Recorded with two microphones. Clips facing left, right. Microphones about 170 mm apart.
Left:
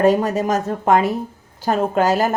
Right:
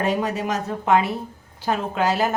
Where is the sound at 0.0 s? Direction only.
45° left (ahead or behind).